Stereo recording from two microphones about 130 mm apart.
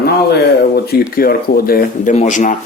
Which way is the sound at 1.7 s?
75° left (ahead or behind).